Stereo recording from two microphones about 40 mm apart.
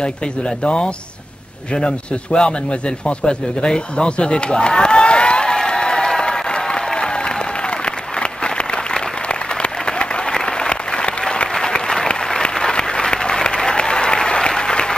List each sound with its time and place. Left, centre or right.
0.7 s speech: left
5.7 s crowd: centre
6.6 s applause: centre